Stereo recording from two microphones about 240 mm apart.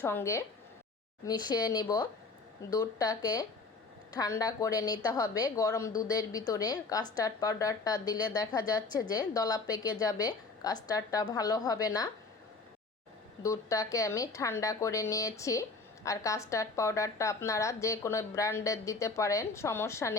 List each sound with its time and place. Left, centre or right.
0.0 s a woman's voice: centre
13.4 s a woman's voice: centre